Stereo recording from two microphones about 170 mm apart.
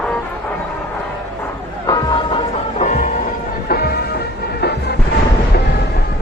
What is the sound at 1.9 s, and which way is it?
Music, 25° left (ahead or behind).